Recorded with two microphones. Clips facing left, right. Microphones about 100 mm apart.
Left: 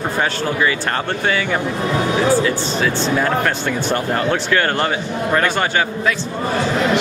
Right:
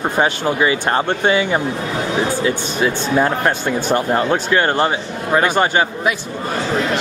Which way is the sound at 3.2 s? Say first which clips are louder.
Right 1 dB; 15° right (ahead or behind).